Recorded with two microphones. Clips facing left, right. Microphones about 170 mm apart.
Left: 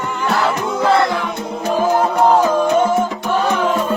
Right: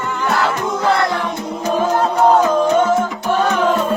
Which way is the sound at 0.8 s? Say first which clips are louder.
Left 3 dB; 25° left (ahead or behind).